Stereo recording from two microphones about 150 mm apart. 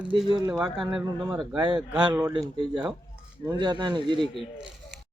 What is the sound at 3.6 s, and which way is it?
Speech, 30° right (ahead or behind).